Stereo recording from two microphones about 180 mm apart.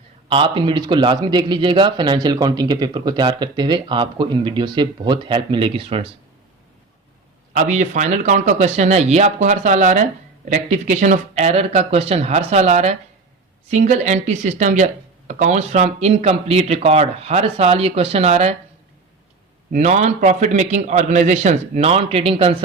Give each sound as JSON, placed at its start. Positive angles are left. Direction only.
{"t": 0.3, "sound": "a man's voice", "side_deg": -25}
{"t": 7.5, "sound": "speech", "side_deg": -40}
{"t": 19.7, "sound": "speech", "side_deg": -40}